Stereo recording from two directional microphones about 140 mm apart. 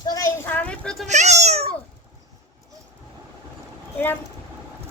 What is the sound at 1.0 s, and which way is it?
Cat, 55° right (ahead or behind).